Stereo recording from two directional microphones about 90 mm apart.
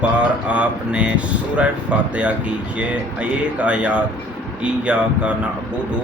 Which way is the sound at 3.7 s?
15° right (ahead or behind).